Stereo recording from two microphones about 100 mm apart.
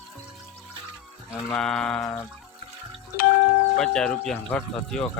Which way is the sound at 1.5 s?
5° left (ahead or behind).